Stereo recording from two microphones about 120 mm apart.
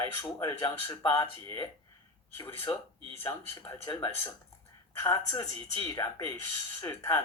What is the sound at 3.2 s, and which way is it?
Speech, 20° left (ahead or behind).